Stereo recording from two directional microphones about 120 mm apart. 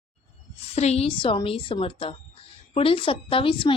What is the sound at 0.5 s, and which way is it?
A woman's voice, 60° left (ahead or behind).